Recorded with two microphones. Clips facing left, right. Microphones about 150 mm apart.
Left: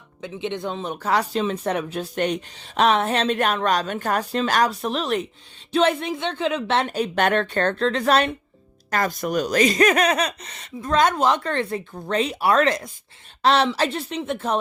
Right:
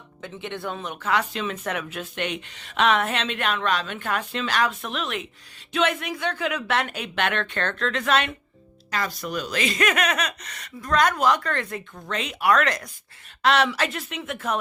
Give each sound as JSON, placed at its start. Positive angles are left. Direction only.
{"t": 0.2, "sound": "speech", "side_deg": 20}
{"t": 0.9, "sound": "speech", "side_deg": 35}
{"t": 8.9, "sound": "speech", "side_deg": 50}